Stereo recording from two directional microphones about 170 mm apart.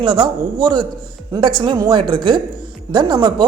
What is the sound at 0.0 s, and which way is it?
Speech, 25° right (ahead or behind).